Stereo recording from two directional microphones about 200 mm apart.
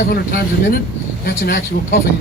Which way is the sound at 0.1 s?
45° left (ahead or behind).